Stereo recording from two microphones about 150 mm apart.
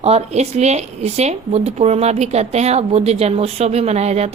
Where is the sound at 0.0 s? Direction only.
45° right (ahead or behind).